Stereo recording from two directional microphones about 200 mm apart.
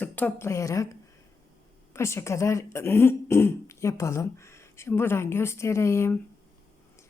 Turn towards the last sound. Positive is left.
turn(degrees=15)  # may be behind; listen again after turning